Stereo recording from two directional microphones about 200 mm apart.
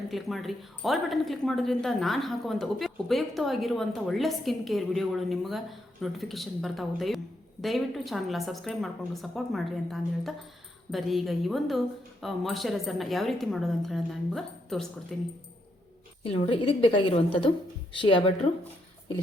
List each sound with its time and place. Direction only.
0.1 s speech: centre (ahead or behind)
16.2 s a woman's voice: 30° left (ahead or behind)